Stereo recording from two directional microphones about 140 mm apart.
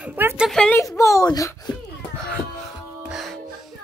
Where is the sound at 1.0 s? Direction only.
25° left (ahead or behind).